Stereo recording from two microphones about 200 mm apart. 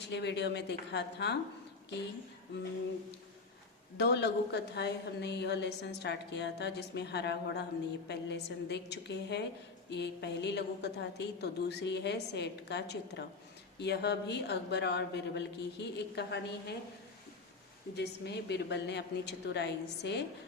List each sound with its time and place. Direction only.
0.0 s a woman's voice: 60° left (ahead or behind)
3.9 s a woman's voice: 55° left (ahead or behind)
17.9 s a woman's voice: 55° left (ahead or behind)